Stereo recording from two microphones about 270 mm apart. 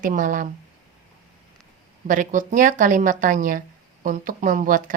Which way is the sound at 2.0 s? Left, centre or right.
Right.